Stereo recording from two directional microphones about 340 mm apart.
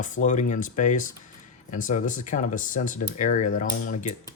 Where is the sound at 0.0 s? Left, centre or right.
Left.